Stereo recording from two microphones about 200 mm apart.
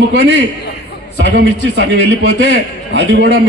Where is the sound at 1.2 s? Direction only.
60° right (ahead or behind).